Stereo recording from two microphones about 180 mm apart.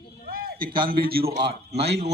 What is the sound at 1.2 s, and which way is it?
Speech, 35° right (ahead or behind).